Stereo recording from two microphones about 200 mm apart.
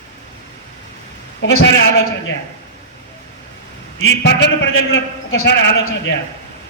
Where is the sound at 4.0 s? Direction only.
60° left (ahead or behind).